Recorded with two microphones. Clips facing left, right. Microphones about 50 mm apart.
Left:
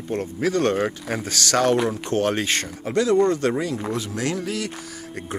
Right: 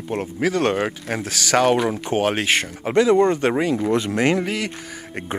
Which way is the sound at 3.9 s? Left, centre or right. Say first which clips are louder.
Right 7 dB; right.